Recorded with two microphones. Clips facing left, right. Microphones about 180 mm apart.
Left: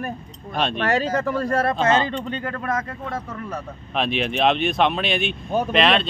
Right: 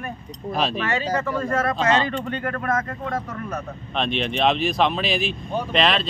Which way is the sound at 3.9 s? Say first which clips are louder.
Left 1 dB; 5° left (ahead or behind).